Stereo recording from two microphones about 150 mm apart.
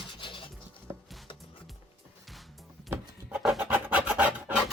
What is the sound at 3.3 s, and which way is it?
Filing, 5° right (ahead or behind).